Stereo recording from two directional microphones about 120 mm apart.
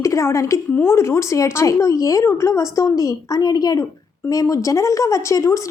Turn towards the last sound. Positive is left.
turn(degrees=25)  # may be behind; listen again after turning